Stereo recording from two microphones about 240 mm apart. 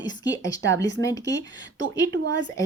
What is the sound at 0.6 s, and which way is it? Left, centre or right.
Speech, right.